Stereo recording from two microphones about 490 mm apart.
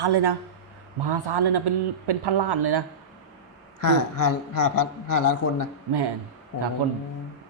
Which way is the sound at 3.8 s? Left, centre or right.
Left.